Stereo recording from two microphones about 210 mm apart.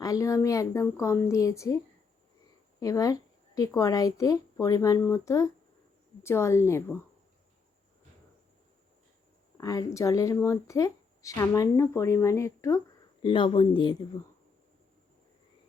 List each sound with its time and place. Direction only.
0.0 s speech: 15° left (ahead or behind)
2.8 s speech: 15° left (ahead or behind)
9.6 s speech: 15° left (ahead or behind)